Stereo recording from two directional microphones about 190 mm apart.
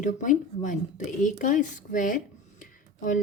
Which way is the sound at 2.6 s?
45° left (ahead or behind).